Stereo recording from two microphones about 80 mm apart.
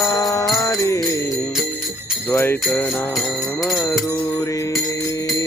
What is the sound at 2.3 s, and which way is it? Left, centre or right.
Jingle bell, left.